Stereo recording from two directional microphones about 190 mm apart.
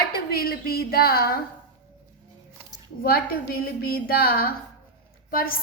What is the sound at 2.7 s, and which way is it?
A woman's voice, 55° left (ahead or behind).